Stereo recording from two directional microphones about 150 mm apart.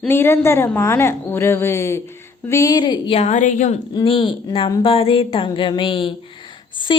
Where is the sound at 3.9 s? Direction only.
35° left (ahead or behind).